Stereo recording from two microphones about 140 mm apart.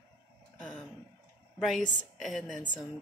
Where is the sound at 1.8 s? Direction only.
65° left (ahead or behind).